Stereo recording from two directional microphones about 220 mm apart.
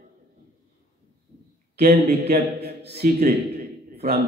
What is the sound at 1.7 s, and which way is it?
A man's voice, 45° right (ahead or behind).